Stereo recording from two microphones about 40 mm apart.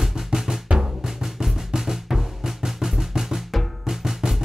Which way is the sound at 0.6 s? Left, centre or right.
Centre.